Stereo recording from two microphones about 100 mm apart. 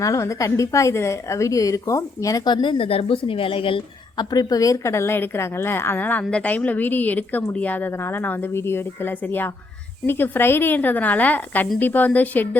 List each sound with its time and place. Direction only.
0.0 s a woman's voice: 30° left (ahead or behind); by 4.3 s 60° left (ahead or behind)
4.3 s a woman's voice: 40° left (ahead or behind); by 12.5 s 15° left (ahead or behind)